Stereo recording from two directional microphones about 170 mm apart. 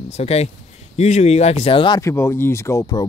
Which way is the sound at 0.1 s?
40° left (ahead or behind).